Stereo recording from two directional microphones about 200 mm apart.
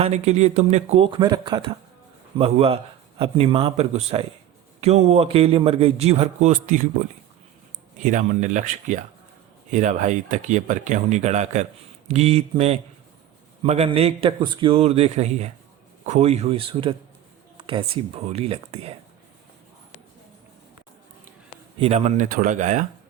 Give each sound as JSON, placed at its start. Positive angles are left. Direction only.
{"t": 0.0, "sound": "a man's voice", "side_deg": -30}
{"t": 7.9, "sound": "a man's voice", "side_deg": -40}
{"t": 21.8, "sound": "speech", "side_deg": -30}